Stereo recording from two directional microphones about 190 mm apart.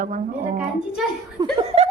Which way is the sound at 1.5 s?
30° right (ahead or behind).